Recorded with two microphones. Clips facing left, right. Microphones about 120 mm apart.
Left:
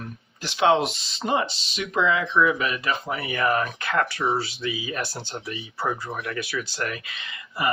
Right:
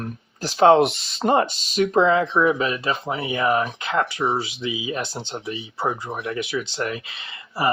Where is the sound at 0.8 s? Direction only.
60° right (ahead or behind).